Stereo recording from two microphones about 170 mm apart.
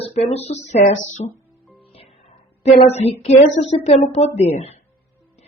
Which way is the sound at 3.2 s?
40° left (ahead or behind).